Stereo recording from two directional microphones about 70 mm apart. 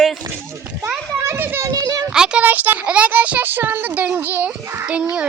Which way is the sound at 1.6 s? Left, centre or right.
Right.